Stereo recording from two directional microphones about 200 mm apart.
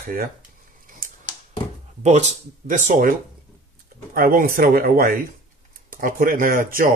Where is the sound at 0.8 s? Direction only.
40° right (ahead or behind).